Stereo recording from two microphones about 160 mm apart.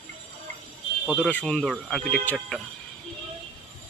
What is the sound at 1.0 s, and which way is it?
Speech, 5° right (ahead or behind).